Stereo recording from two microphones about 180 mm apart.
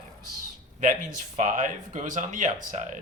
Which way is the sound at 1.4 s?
45° right (ahead or behind).